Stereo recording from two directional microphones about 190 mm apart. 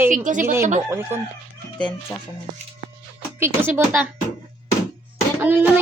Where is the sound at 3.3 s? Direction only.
10° right (ahead or behind).